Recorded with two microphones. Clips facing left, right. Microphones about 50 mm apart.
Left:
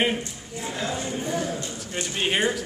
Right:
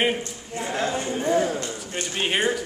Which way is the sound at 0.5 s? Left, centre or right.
Right.